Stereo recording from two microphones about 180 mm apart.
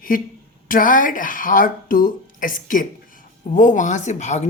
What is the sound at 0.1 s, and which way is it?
Speech, 50° left (ahead or behind).